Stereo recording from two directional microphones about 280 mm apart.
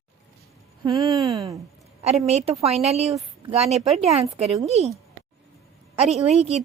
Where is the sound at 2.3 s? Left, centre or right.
Right.